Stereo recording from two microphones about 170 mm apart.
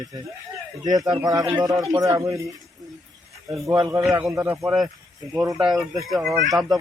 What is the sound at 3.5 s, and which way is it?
Speech, 20° right (ahead or behind).